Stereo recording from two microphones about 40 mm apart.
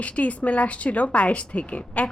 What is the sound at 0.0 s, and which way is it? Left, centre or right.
A woman's voice, left.